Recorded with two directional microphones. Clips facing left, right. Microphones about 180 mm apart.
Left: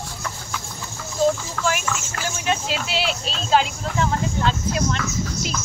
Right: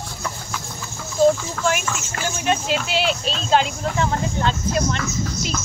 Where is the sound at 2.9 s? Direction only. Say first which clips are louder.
Right 3 dB; centre (ahead or behind).